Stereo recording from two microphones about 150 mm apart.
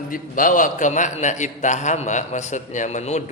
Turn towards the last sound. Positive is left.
turn(degrees=50)  # may be behind; listen again after turning